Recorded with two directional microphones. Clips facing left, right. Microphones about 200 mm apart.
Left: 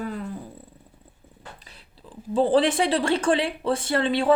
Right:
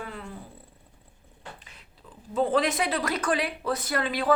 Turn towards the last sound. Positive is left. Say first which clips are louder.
# left 5 dB
turn(degrees=30)  # may be behind; listen again after turning